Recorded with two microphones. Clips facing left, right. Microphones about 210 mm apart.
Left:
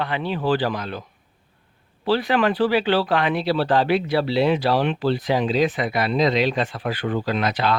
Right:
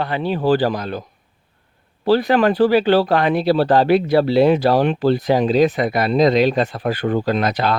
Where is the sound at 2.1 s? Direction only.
40° right (ahead or behind).